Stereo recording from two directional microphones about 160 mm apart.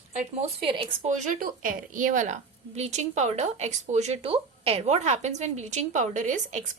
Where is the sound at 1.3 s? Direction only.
60° right (ahead or behind).